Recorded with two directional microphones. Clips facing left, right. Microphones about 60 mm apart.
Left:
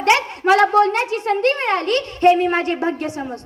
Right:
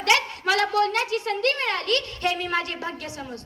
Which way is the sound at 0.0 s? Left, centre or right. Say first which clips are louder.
Left 6 dB; left.